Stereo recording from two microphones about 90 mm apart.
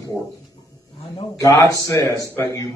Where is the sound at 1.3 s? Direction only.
40° left (ahead or behind).